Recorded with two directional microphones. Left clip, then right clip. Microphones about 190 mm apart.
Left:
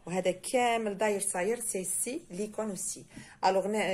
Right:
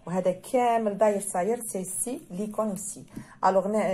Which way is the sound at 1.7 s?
10° left (ahead or behind).